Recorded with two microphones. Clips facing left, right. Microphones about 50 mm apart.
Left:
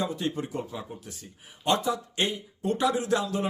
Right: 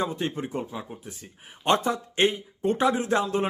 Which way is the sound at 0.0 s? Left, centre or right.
Right.